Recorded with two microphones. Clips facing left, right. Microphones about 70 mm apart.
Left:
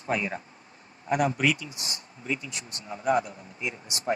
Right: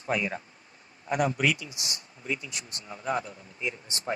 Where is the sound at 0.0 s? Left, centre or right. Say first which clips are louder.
Even; left.